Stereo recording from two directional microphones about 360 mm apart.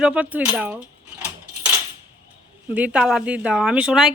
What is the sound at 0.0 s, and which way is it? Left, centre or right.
Speech, centre.